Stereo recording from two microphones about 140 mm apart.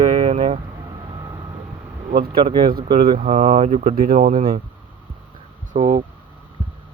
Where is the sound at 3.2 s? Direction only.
50° right (ahead or behind).